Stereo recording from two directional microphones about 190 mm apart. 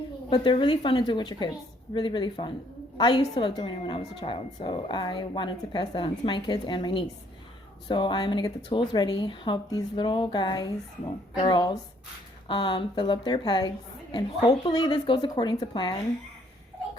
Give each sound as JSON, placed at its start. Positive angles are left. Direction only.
{"t": 0.3, "sound": "a woman's voice", "side_deg": 25}